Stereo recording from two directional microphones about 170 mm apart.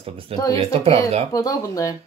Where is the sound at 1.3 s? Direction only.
20° left (ahead or behind).